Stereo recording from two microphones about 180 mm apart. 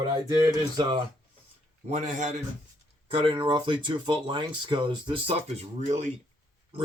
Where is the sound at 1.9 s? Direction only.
40° right (ahead or behind).